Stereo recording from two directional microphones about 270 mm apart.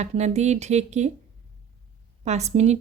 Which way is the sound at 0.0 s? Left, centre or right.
Right.